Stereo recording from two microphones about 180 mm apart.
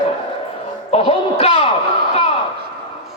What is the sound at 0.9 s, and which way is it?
Speech, 35° left (ahead or behind).